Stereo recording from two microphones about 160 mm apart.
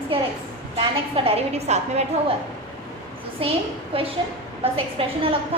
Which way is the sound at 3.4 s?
35° right (ahead or behind).